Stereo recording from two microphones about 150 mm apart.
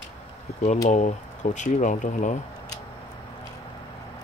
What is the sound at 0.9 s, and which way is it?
Speech, 55° left (ahead or behind).